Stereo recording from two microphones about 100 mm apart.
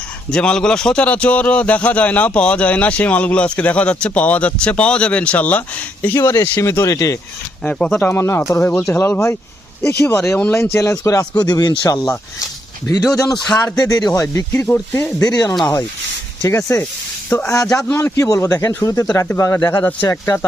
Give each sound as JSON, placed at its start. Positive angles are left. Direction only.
{"t": 0.3, "sound": "speech", "side_deg": 10}
{"t": 7.6, "sound": "speech", "side_deg": 10}
{"t": 7.9, "sound": "speech", "side_deg": 20}
{"t": 13.3, "sound": "speech", "side_deg": 5}
{"t": 13.8, "sound": "speech", "side_deg": 35}
{"t": 14.5, "sound": "speech", "side_deg": 20}
{"t": 15.2, "sound": "speech", "side_deg": 35}
{"t": 17.9, "sound": "speech", "side_deg": 25}